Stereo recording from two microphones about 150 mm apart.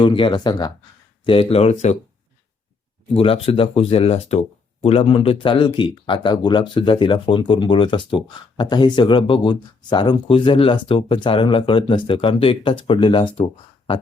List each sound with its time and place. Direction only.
0.0 s speech: 35° left (ahead or behind)
3.2 s speech: 40° left (ahead or behind)